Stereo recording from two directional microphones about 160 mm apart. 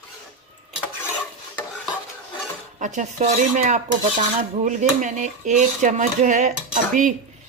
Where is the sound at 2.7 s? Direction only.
50° right (ahead or behind).